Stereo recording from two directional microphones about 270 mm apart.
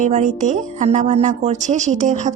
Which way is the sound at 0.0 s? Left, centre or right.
Right.